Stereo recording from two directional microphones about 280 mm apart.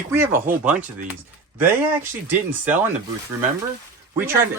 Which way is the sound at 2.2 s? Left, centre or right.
Centre.